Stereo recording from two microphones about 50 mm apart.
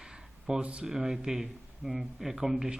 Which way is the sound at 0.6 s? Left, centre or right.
Right.